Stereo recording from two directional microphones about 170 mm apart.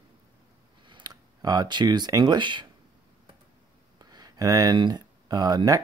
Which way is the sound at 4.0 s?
25° right (ahead or behind).